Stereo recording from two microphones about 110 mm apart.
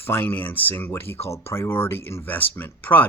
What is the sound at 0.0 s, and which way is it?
A man's voice, 20° left (ahead or behind).